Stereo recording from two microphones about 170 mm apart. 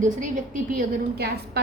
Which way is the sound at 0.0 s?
50° right (ahead or behind).